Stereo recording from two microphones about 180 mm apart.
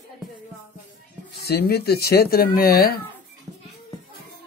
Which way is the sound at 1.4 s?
60° left (ahead or behind).